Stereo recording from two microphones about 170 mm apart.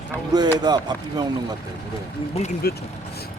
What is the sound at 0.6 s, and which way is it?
Speech, 25° right (ahead or behind).